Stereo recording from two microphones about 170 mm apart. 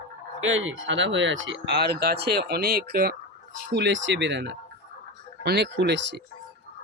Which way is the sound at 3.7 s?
90° right.